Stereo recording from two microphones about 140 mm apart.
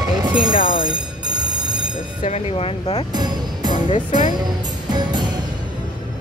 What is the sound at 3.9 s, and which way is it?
Speech, 65° left (ahead or behind).